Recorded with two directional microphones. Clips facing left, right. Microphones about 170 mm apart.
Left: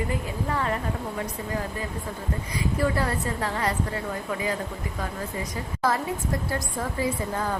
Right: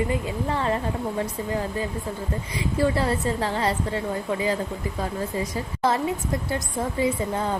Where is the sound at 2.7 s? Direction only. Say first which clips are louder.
Right 4 dB; 25° right (ahead or behind).